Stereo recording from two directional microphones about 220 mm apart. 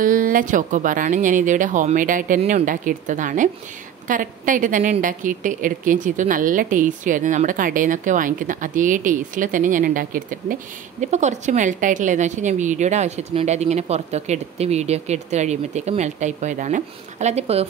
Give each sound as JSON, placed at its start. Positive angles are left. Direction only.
{"t": 0.0, "sound": "a woman's voice", "side_deg": -40}